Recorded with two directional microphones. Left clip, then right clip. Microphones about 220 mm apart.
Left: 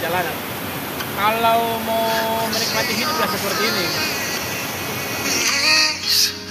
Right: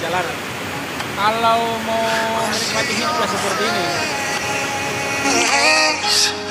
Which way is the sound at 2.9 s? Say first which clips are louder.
Right 2 dB; 20° left (ahead or behind).